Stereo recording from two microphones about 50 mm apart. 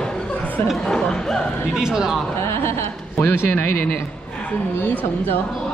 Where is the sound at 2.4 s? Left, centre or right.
Left.